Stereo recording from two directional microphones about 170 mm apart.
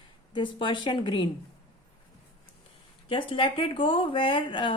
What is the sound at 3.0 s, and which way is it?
Speech, 30° left (ahead or behind).